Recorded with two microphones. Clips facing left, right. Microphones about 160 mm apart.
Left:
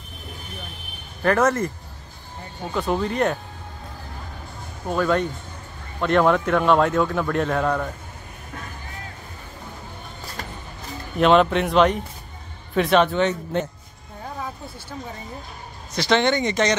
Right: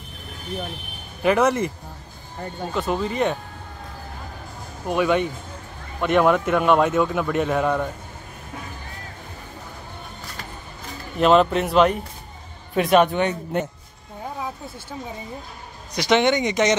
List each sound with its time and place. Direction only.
1.2 s speech: 10° right (ahead or behind)
2.7 s a man's voice: centre (ahead or behind)
4.8 s a man's voice: 10° right (ahead or behind)
11.1 s a man's voice: centre (ahead or behind)
15.9 s speech: 15° right (ahead or behind)